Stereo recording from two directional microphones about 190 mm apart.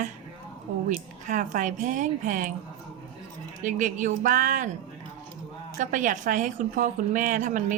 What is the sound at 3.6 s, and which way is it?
A woman's voice, 40° right (ahead or behind).